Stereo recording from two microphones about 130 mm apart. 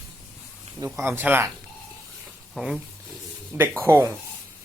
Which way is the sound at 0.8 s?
20° right (ahead or behind).